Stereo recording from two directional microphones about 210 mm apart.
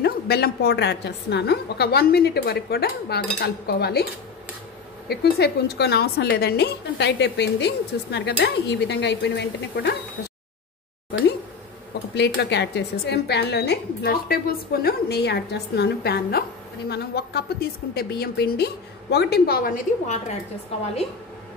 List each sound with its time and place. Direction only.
0.0 s a woman's voice: 50° left (ahead or behind)
12.2 s a woman's voice: 55° left (ahead or behind); by 20.3 s 35° left (ahead or behind)